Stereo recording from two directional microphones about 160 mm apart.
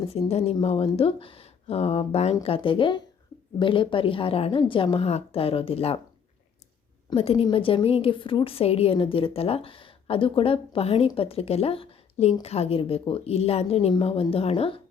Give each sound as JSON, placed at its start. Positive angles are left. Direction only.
{"t": 0.1, "sound": "a woman's voice", "side_deg": 40}
{"t": 7.1, "sound": "a woman's voice", "side_deg": 35}